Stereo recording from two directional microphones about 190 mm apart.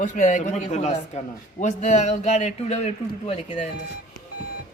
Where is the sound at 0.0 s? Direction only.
40° left (ahead or behind).